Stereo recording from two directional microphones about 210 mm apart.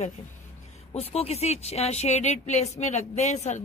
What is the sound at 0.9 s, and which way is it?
A man's voice, 30° left (ahead or behind).